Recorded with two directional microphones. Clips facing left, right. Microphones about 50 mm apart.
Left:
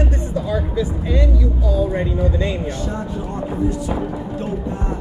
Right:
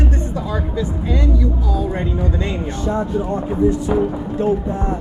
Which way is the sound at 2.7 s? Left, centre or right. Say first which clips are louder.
Right 5 dB; right.